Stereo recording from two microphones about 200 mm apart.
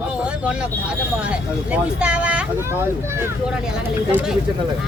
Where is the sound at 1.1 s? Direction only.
5° right (ahead or behind).